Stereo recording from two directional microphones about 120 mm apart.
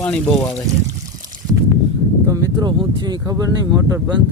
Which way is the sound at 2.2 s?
30° right (ahead or behind).